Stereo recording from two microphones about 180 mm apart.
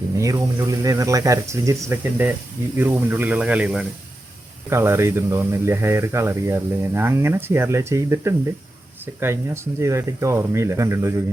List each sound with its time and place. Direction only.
0.2 s speech: 20° right (ahead or behind)